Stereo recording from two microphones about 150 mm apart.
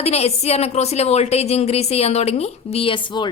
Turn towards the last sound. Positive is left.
turn(degrees=30)  # may be behind; listen again after turning